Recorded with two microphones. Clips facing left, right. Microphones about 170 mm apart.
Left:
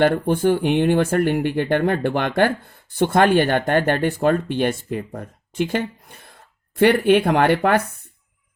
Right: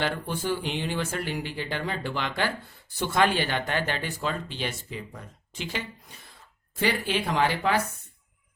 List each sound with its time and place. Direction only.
0.0 s speech: 55° left (ahead or behind)